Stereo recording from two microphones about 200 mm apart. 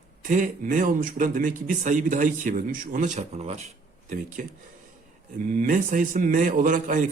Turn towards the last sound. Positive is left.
turn(degrees=-40)  # may be behind; listen again after turning